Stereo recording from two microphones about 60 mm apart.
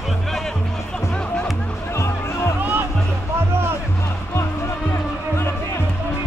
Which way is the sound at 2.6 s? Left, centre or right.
Right.